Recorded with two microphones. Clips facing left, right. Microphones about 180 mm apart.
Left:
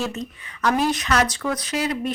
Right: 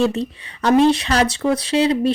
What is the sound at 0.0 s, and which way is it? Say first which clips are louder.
A woman's voice: right 9 dB; 30° right (ahead or behind).